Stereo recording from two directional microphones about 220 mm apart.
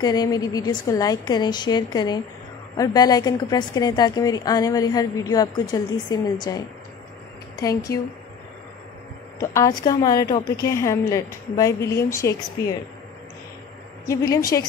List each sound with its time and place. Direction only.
0.0 s a woman's voice: 15° left (ahead or behind)
7.6 s a woman's voice: 15° left (ahead or behind)
9.5 s a woman's voice: 15° left (ahead or behind)
14.0 s a woman's voice: 15° left (ahead or behind)